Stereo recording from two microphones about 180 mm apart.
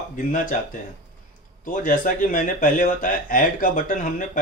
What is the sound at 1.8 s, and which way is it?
Speech, 50° left (ahead or behind).